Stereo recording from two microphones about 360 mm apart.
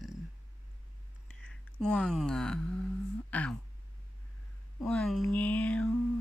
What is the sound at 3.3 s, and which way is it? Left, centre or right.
Speech, centre.